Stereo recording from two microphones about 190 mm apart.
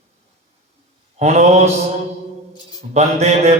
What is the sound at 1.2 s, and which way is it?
Speech, 35° right (ahead or behind).